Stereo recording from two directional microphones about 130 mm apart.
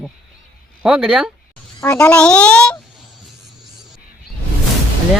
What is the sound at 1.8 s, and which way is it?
Speech, 15° left (ahead or behind).